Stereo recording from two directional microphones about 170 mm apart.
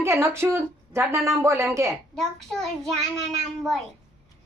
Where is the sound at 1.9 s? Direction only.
Centre (ahead or behind).